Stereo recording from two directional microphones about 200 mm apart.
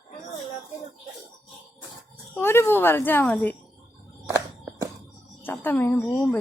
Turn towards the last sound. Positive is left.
turn(degrees=5)  # may be behind; listen again after turning